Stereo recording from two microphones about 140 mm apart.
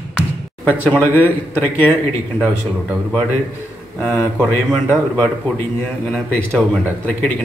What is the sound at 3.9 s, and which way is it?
A man's voice, 10° left (ahead or behind).